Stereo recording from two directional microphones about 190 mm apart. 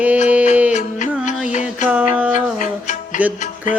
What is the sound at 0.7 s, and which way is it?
Music, 40° left (ahead or behind).